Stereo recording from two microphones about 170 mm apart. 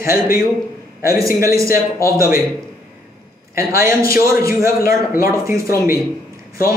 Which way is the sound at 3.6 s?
15° right (ahead or behind).